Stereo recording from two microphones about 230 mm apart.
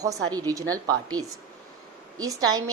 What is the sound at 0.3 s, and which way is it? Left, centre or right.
Speech, centre.